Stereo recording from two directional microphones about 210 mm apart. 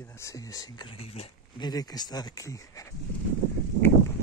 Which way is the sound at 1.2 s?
20° left (ahead or behind).